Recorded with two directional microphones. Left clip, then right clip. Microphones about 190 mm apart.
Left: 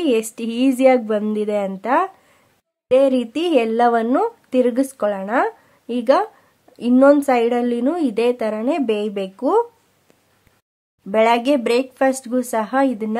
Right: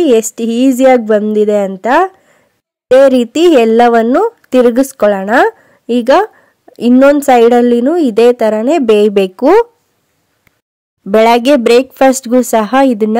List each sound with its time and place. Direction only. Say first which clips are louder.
0.0 s speech: right 10 dB; 30° right (ahead or behind)
11.1 s speech: right 8 dB; 45° right (ahead or behind)